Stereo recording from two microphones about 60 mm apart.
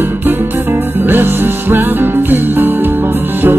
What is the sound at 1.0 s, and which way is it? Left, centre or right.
Music, right.